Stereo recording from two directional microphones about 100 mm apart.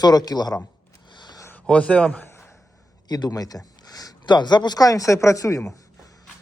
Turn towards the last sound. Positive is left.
turn(degrees=35)  # may be behind; listen again after turning